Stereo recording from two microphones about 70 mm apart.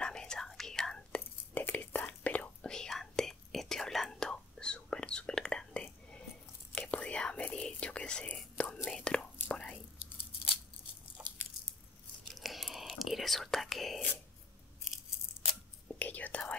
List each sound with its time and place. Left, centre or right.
0.0 s whispering: centre
1.6 s whispering: left
11.2 s biting: centre
12.3 s whispering: centre
16.0 s whispering: left